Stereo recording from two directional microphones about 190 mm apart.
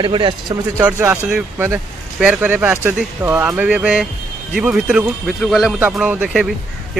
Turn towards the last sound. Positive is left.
turn(degrees=-5)  # may be behind; listen again after turning